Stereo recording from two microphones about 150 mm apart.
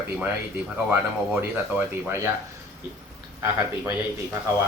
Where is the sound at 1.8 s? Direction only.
15° right (ahead or behind).